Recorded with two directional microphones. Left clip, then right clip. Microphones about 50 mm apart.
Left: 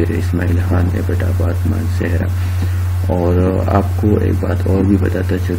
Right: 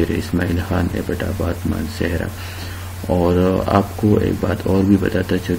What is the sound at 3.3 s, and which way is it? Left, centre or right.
Speech, centre.